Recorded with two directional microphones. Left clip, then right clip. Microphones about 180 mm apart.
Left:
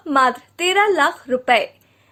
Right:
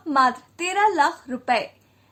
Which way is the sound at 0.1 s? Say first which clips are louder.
Left 3 dB; 30° left (ahead or behind).